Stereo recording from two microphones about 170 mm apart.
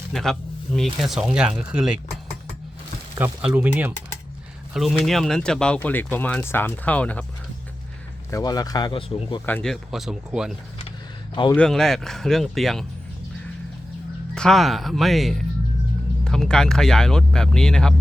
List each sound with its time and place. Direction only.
0.1 s speech: centre (ahead or behind)
3.2 s speech: 10° right (ahead or behind); by 7.3 s 10° left (ahead or behind)
8.3 s speech: 20° left (ahead or behind)
9.5 s speech: 5° left (ahead or behind)
11.5 s speech: 5° left (ahead or behind)
14.3 s speech: centre (ahead or behind)